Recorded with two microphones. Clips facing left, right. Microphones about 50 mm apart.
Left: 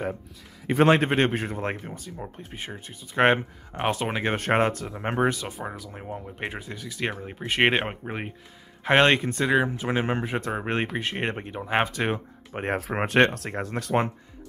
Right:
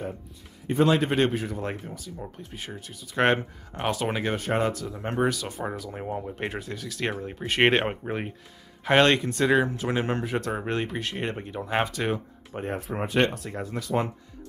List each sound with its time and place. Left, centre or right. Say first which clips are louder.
0.8 s a man's voice: left 2 dB; left
3.2 s speech: left 2 dB; centre
4.4 s speech: left 3 dB; left
4.9 s speech: left 1 dB; left
5.5 s speech: right 3 dB; centre
6.3 s speech: right 1 dB; centre
8.8 s speech: left 1 dB; left
9.4 s speech: right 1 dB; centre; by 12.6 s left
12.6 s speech: left 4 dB; left
12.9 s speech: left 3 dB; left